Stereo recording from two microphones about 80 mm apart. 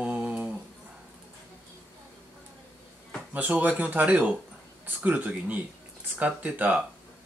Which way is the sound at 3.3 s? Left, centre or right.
Right.